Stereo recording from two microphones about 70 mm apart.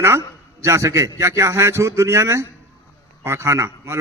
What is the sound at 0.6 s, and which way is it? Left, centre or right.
A man's voice, right.